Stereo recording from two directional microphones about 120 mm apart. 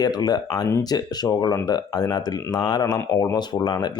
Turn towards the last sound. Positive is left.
turn(degrees=35)  # may be behind; listen again after turning